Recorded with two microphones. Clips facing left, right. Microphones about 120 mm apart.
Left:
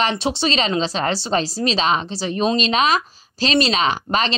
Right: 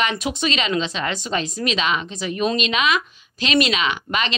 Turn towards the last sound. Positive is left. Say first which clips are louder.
# left 4 dB
turn(degrees=35)  # may be behind; listen again after turning